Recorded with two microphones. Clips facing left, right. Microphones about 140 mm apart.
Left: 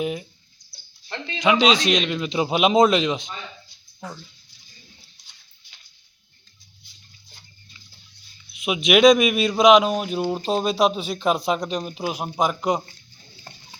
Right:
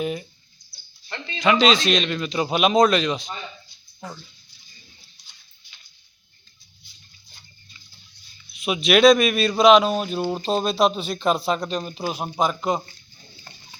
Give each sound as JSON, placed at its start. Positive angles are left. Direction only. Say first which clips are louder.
{"t": 0.0, "sound": "bird", "louder": "even", "side_deg": 10}
{"t": 1.0, "sound": "a man's voice", "louder": "even", "side_deg": 10}
{"t": 8.5, "sound": "a man's voice", "louder": "even", "side_deg": 15}
{"t": 13.5, "sound": "a sound", "louder": "left 4 dB", "side_deg": 25}